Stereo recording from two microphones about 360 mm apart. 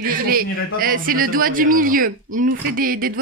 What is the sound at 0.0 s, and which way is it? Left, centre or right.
Speech, right.